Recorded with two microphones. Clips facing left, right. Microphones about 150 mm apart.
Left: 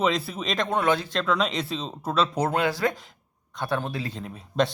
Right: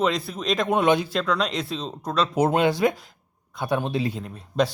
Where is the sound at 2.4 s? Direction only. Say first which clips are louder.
Right 4 dB; 20° right (ahead or behind).